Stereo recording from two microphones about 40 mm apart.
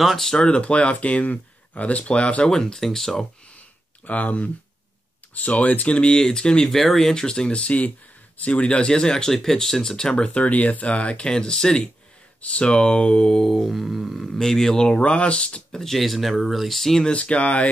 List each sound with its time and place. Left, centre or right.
0.0 s speech: centre
0.3 s speech: left
2.5 s speech: centre
4.0 s speech: left; by 6.7 s centre
6.7 s speech: centre
7.2 s speech: left
12.4 s speech: left
13.5 s speech: centre
14.4 s speech: centre
14.8 s speech: left
15.7 s speech: centre
16.0 s speech: centre
17.0 s speech: left